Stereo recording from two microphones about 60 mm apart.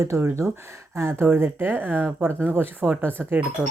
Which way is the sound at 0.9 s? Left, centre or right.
Right.